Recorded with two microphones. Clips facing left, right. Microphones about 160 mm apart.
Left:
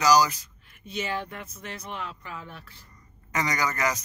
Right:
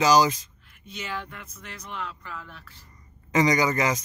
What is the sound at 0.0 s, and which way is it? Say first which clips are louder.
Speech: right 1 dB; 20° right (ahead or behind).